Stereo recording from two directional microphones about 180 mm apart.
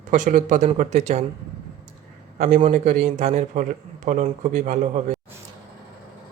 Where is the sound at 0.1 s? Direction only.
45° right (ahead or behind).